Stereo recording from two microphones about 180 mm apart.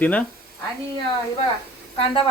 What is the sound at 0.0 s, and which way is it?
Speech, 10° left (ahead or behind).